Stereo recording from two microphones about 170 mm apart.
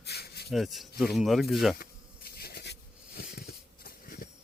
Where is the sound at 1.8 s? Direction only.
65° left (ahead or behind); by 3.2 s 80° left.